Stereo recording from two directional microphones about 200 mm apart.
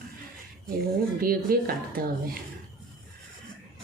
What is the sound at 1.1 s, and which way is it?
Speech, 45° right (ahead or behind).